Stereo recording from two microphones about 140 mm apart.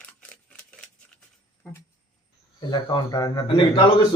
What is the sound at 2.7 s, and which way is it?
Speech, 30° left (ahead or behind).